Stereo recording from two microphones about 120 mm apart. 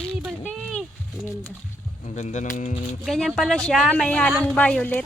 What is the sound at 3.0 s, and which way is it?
Speech, centre (ahead or behind).